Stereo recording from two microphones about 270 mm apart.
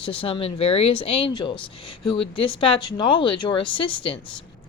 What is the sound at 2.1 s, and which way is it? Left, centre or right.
Speech, left.